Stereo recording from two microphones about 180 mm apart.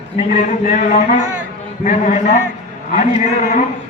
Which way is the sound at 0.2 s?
45° left (ahead or behind).